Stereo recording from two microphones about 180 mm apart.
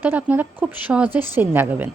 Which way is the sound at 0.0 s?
10° right (ahead or behind).